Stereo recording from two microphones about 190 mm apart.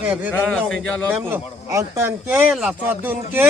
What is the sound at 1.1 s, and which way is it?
Speech, 10° right (ahead or behind).